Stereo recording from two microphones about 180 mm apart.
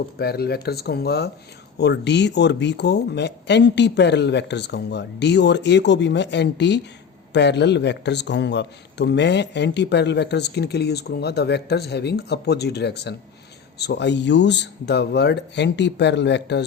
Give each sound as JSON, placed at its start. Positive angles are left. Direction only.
{"t": 0.2, "sound": "a man's voice", "side_deg": 60}